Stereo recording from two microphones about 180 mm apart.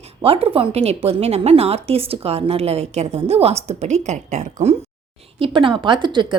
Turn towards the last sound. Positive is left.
turn(degrees=-25)  # may be behind; listen again after turning